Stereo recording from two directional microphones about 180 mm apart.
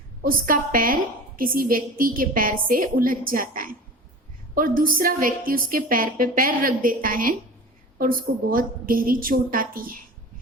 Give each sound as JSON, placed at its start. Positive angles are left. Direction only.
{"t": 0.2, "sound": "a woman's voice", "side_deg": -50}